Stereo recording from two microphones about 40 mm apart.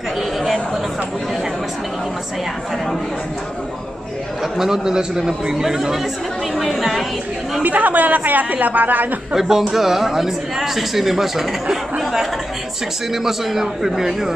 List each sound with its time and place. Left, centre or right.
4.6 s speech: centre
6.5 s a woman's voice: centre
7.6 s a woman's voice: right
9.3 s speech: centre